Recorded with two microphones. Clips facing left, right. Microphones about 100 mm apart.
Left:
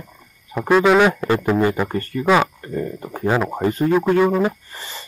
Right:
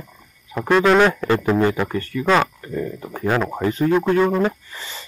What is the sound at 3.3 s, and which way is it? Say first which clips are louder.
Speech: left 1 dB; 5° left (ahead or behind).